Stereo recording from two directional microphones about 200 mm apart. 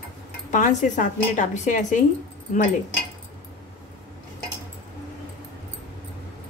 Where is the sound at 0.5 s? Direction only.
40° left (ahead or behind).